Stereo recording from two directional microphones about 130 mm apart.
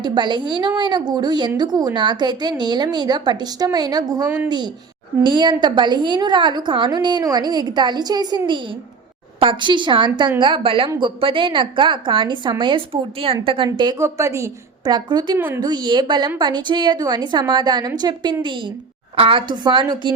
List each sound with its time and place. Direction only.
0.0 s a woman's voice: 35° right (ahead or behind)
9.4 s a woman's voice: 40° right (ahead or behind)
14.0 s a woman's voice: 20° right (ahead or behind)
15.4 s speech: 15° right (ahead or behind)
15.6 s a woman's voice: 35° right (ahead or behind)